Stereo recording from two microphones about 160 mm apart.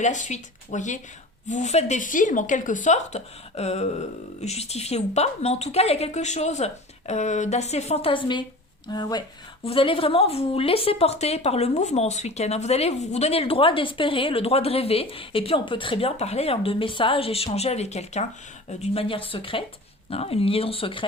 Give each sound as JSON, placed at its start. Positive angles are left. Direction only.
{"t": 0.0, "sound": "a woman's voice", "side_deg": 50}